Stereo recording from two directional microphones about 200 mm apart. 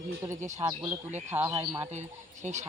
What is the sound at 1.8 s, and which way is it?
Speech, 35° right (ahead or behind).